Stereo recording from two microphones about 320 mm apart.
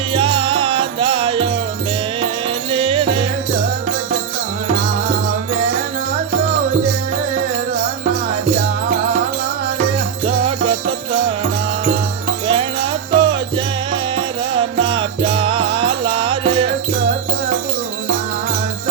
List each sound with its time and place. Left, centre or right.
0.1 s music: centre
2.7 s music: centre
10.2 s music: centre
12.5 s jingle bell: centre
13.9 s music: centre